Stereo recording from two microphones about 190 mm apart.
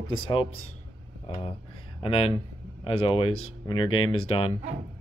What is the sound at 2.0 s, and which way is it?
Speech, 30° left (ahead or behind).